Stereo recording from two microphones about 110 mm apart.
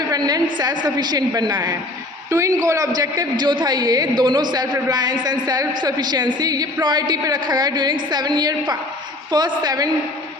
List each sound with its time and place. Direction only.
0.1 s a man's voice: 35° right (ahead or behind)
2.3 s a man's voice: 30° right (ahead or behind)